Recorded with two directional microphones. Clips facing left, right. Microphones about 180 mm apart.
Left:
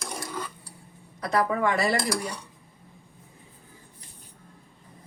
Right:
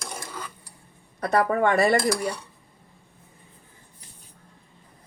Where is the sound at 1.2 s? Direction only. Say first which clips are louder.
Right 3 dB; 55° right (ahead or behind).